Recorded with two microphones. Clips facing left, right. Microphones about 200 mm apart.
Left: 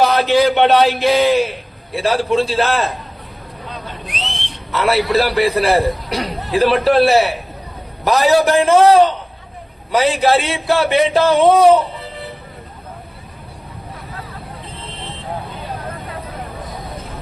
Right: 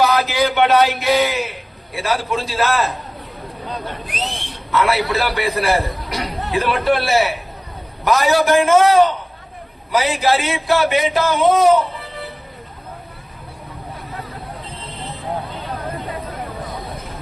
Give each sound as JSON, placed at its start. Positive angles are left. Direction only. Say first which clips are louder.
{"t": 0.0, "sound": "a man's voice", "louder": "left 4 dB", "side_deg": 30}
{"t": 4.7, "sound": "a man's voice", "louder": "left 2 dB", "side_deg": 30}